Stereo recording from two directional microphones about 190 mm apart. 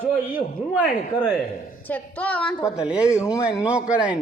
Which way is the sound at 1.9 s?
5° left (ahead or behind).